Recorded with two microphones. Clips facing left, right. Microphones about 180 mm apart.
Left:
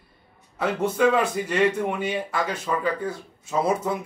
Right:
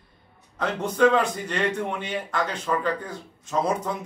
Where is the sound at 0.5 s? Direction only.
10° left (ahead or behind).